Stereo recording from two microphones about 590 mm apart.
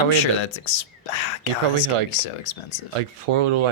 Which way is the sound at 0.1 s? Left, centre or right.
Left.